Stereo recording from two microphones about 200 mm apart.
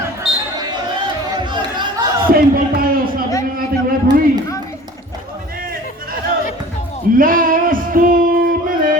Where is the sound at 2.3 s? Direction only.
45° right (ahead or behind).